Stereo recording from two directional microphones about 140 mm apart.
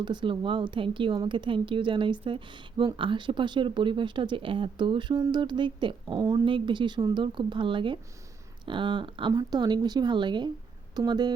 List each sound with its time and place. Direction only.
0.0 s speech: 35° right (ahead or behind)